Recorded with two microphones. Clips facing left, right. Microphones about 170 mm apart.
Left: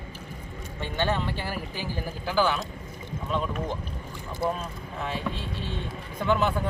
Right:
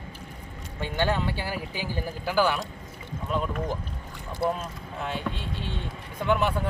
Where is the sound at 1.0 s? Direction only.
10° right (ahead or behind).